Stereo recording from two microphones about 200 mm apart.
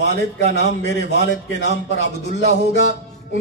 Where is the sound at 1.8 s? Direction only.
35° right (ahead or behind).